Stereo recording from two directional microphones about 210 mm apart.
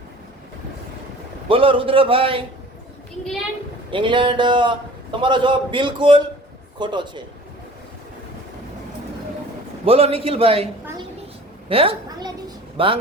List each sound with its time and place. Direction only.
1.5 s a man's voice: 25° right (ahead or behind)
3.9 s a man's voice: 25° right (ahead or behind)
9.8 s a man's voice: 25° right (ahead or behind)
11.7 s a woman's voice: 25° right (ahead or behind)